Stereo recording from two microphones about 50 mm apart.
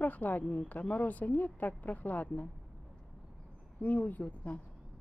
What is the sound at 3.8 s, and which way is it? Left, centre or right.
Speech, left.